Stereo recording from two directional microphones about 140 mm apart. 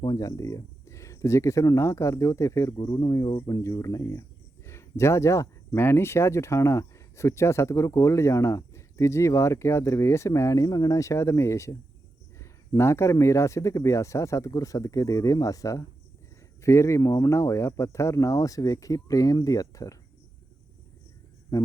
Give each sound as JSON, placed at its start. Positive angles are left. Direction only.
{"t": 0.0, "sound": "speech", "side_deg": 25}
{"t": 21.5, "sound": "speech", "side_deg": 20}